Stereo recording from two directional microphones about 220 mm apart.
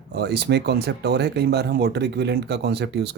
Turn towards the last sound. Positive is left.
turn(degrees=-50)  # may be behind; listen again after turning